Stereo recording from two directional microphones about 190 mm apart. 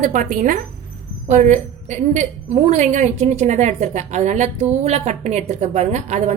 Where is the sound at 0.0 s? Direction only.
45° right (ahead or behind).